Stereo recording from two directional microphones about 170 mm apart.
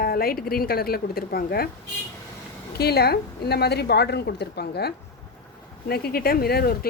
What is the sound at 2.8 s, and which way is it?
A woman's voice, 70° left (ahead or behind).